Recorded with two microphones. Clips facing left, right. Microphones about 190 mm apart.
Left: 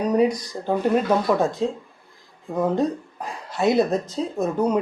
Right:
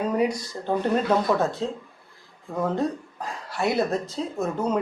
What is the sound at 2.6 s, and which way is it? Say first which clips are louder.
Speech: left 4 dB; 15° left (ahead or behind).